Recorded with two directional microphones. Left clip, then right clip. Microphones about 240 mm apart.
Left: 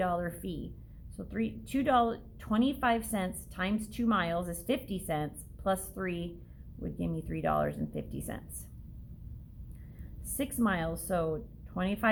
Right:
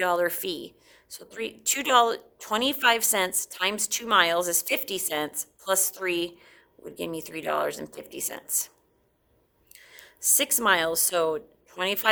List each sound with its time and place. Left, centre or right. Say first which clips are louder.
0.0 s a woman's voice: right 8 dB; right
9.9 s a woman's voice: right 18 dB; right